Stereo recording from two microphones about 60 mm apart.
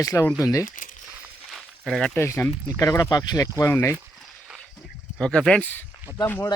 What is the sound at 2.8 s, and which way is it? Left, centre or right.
Speech, left.